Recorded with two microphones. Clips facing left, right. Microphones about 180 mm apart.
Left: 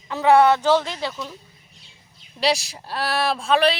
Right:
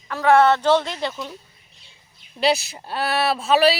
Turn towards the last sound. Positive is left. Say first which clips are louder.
# right 2 dB
turn(degrees=-5)  # may be behind; listen again after turning